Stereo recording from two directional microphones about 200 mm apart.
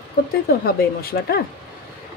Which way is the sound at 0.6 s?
50° left (ahead or behind).